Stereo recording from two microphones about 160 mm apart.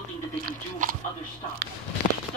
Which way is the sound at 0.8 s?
55° right (ahead or behind).